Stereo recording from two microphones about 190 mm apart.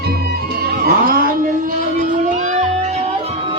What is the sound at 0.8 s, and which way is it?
Music, 50° right (ahead or behind).